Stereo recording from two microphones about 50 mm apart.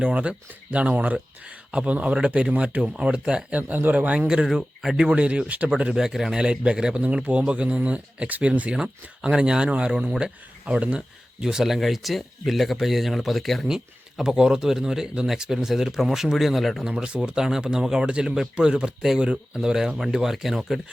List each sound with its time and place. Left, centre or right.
0.0 s speech: right
3.6 s speech: right
4.3 s speech: centre
4.9 s speech: right
11.4 s speech: centre
13.7 s speech: centre
16.8 s speech: centre